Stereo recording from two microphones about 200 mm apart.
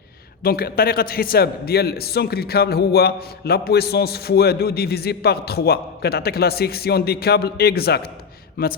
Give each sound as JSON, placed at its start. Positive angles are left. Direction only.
{"t": 0.4, "sound": "a man's voice", "side_deg": 50}